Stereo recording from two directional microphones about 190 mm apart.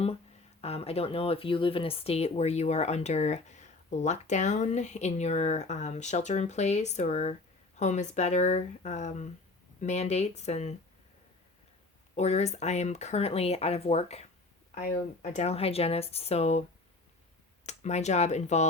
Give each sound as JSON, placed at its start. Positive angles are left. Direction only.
{"t": 0.6, "sound": "speech", "side_deg": 30}
{"t": 12.1, "sound": "speech", "side_deg": 35}
{"t": 17.7, "sound": "speech", "side_deg": 35}